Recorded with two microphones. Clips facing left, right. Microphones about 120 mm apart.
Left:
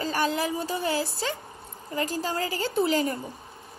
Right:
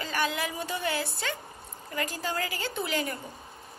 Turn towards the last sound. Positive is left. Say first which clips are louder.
# left 7 dB
turn(degrees=30)  # may be behind; listen again after turning